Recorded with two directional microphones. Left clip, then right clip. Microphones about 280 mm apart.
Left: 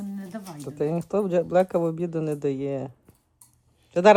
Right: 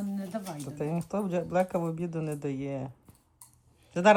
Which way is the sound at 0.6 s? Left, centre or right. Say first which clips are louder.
Left 13 dB; left.